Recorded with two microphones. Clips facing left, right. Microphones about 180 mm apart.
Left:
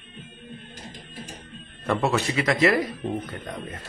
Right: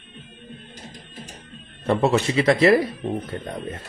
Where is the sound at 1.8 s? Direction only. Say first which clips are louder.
Right 4 dB; 25° right (ahead or behind).